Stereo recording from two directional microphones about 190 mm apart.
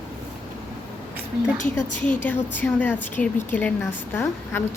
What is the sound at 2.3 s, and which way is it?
A woman's voice, 10° left (ahead or behind).